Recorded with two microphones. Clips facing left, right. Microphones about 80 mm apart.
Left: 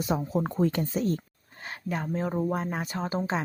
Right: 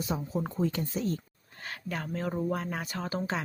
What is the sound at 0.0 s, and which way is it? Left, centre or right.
Speech, left.